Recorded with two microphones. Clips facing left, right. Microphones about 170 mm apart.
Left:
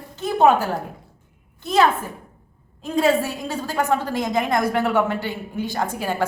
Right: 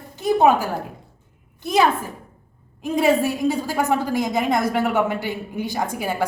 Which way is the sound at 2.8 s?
15° right (ahead or behind).